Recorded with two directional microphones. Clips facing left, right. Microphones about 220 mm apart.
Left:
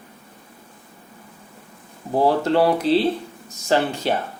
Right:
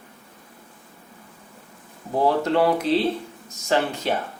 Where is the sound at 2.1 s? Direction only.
30° left (ahead or behind).